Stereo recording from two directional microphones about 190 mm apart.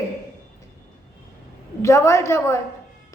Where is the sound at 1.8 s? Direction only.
15° left (ahead or behind).